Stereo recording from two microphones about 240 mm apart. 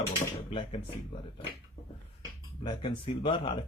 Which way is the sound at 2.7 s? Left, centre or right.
Left.